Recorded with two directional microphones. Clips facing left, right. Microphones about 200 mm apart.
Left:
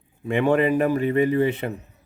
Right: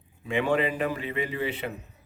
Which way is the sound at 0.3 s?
55° left (ahead or behind).